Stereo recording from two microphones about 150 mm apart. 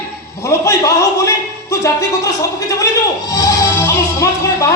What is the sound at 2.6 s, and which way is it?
Speech, 20° left (ahead or behind).